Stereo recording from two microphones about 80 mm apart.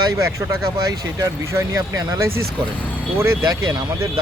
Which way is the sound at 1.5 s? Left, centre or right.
Right.